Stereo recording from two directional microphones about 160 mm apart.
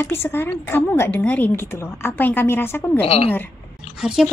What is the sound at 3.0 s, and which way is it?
Speech, 40° left (ahead or behind).